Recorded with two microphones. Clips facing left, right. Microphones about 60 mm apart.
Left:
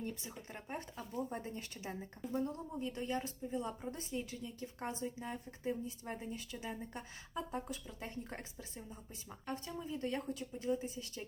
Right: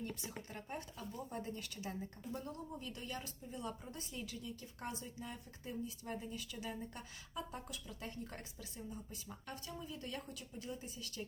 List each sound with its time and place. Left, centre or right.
0.5 s speech: left